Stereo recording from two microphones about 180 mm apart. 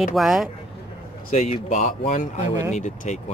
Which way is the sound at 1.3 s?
40° left (ahead or behind).